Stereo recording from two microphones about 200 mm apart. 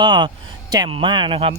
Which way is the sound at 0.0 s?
25° right (ahead or behind).